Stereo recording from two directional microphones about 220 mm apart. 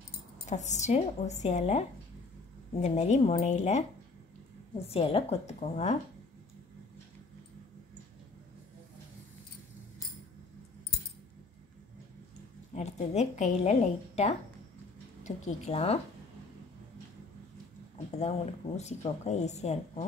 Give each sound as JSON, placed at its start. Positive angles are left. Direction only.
{"t": 0.5, "sound": "a woman's voice", "side_deg": 30}
{"t": 12.7, "sound": "a woman's voice", "side_deg": 30}
{"t": 17.9, "sound": "a woman's voice", "side_deg": 30}